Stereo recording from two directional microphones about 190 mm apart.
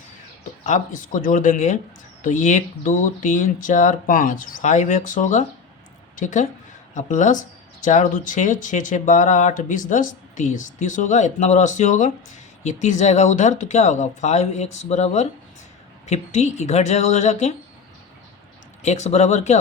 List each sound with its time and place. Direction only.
0.6 s speech: 40° left (ahead or behind)
18.8 s speech: 35° left (ahead or behind)